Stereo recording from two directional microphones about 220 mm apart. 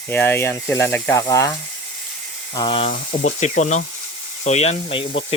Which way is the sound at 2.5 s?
25° left (ahead or behind).